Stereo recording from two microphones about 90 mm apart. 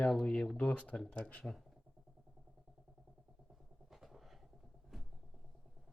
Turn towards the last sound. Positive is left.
turn(degrees=0)  # may be behind; listen again after turning